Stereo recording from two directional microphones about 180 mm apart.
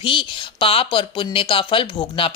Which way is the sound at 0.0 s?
30° left (ahead or behind).